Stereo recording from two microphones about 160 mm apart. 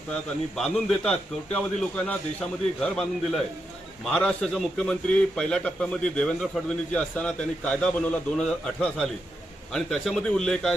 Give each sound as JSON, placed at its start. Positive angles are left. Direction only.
{"t": 0.5, "sound": "a man's voice", "side_deg": 5}